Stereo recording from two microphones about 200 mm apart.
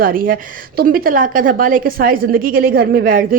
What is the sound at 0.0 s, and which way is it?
A woman's voice, 45° right (ahead or behind).